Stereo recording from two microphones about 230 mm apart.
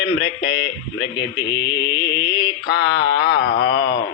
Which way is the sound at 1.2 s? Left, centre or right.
Centre.